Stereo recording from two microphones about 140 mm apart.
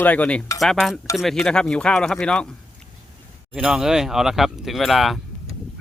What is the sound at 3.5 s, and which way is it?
Speech, 5° right (ahead or behind).